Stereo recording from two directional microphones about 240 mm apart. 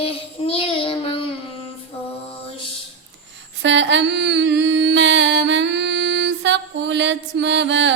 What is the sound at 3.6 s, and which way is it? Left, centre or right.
Mantra, right.